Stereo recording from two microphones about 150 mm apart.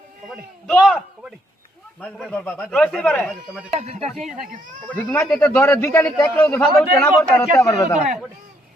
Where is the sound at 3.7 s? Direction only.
45° right (ahead or behind).